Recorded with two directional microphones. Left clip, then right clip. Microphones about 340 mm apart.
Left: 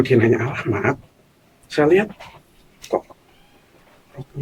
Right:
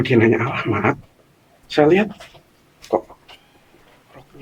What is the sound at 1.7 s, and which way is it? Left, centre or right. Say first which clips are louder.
Speech: right 1 dB; right.